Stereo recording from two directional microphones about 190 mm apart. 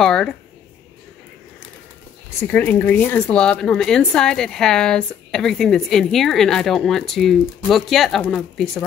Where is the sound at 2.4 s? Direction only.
10° left (ahead or behind).